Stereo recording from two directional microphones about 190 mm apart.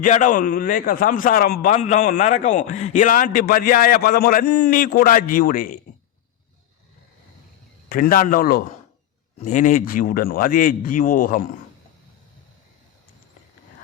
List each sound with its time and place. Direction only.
0.0 s a man's voice: 40° left (ahead or behind)
1.7 s a man's voice: 40° left (ahead or behind)
7.9 s a man's voice: 50° left (ahead or behind)